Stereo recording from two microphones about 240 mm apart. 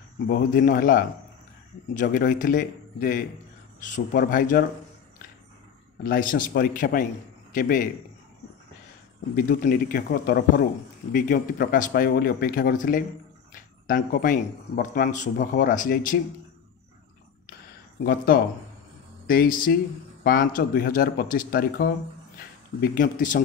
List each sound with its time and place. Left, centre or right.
0.3 s a man's voice: left
6.0 s a man's voice: left
9.3 s a man's voice: left
18.0 s a man's voice: left